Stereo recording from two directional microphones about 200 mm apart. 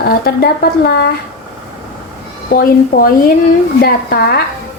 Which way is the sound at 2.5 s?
45° left (ahead or behind).